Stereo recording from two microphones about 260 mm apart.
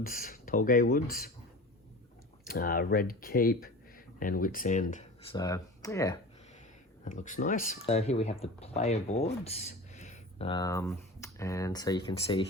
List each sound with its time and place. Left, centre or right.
0.0 s speech: left
2.5 s speech: left
5.4 s speech: centre
7.0 s speech: left